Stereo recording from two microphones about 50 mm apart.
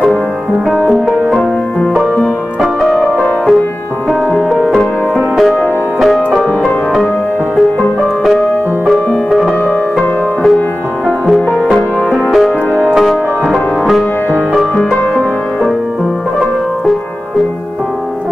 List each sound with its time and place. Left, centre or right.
0.8 s music: centre
2.9 s music: centre
4.1 s music: centre
8.3 s music: centre
9.9 s music: centre
11.7 s music: centre